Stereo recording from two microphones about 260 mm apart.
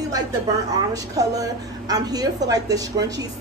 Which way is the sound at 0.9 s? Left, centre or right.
Centre.